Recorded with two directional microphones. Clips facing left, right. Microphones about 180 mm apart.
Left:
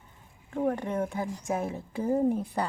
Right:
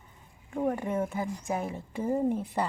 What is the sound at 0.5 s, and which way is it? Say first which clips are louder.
Speech: even; 10° right (ahead or behind).